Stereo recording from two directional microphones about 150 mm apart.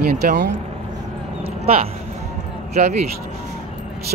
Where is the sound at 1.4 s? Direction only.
45° right (ahead or behind).